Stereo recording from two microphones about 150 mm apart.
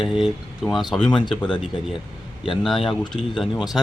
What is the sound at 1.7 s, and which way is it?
Speech, 30° left (ahead or behind).